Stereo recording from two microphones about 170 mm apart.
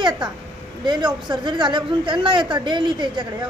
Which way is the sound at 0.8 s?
25° right (ahead or behind).